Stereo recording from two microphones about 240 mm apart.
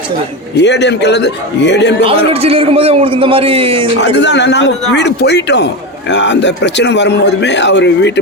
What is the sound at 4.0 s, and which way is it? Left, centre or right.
Speech, left.